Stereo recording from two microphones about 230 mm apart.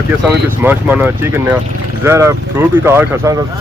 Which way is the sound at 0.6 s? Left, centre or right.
Centre.